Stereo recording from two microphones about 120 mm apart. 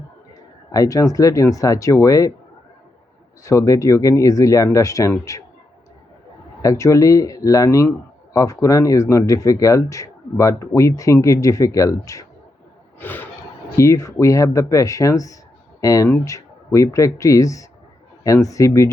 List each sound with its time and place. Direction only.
0.7 s speech: 30° left (ahead or behind)
3.4 s speech: 25° left (ahead or behind)
6.6 s speech: 25° left (ahead or behind)
13.0 s speech: 15° left (ahead or behind)